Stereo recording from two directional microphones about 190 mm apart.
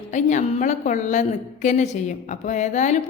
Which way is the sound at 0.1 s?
40° left (ahead or behind).